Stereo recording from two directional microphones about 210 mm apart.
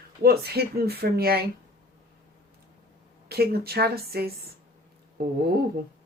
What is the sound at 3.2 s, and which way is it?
Speech, 50° right (ahead or behind).